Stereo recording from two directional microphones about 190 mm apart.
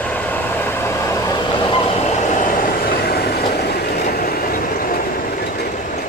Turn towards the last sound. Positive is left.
turn(degrees=50)  # may be behind; listen again after turning